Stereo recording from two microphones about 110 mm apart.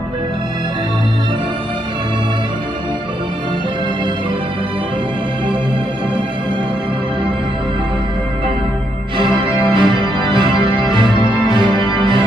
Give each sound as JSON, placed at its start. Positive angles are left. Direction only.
{"t": 9.4, "sound": "organ", "side_deg": -45}